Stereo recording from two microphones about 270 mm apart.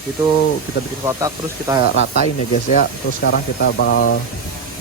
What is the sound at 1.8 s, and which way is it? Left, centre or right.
Speech, left.